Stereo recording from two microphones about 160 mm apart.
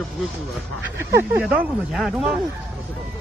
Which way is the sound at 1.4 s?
5° right (ahead or behind).